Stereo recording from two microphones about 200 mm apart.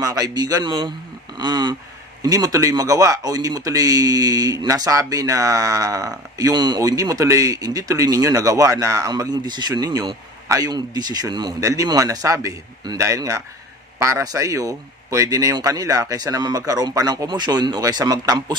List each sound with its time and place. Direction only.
0.0 s a man's voice: 20° right (ahead or behind)